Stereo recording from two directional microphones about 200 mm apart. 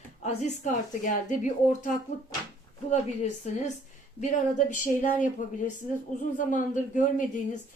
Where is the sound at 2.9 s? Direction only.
35° left (ahead or behind).